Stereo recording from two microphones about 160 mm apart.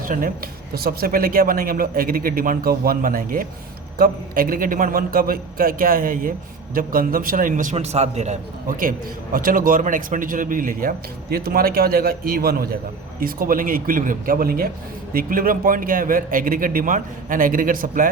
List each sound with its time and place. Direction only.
0.1 s a man's voice: 60° right (ahead or behind); by 8.4 s 45° right (ahead or behind)
8.8 s a man's voice: 60° right (ahead or behind)